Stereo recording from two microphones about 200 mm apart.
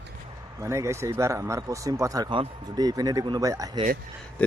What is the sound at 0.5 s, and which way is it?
Speech, 15° right (ahead or behind).